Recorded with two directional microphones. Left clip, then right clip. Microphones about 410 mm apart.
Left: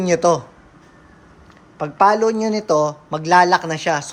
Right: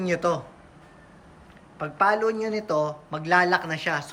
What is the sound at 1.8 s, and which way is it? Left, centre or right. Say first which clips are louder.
Speech: left 8 dB; centre.